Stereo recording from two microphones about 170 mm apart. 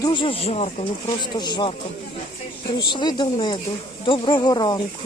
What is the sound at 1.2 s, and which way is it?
Speech, 25° left (ahead or behind).